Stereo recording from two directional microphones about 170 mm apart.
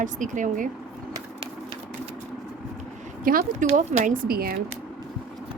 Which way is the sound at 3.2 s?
55° right (ahead or behind).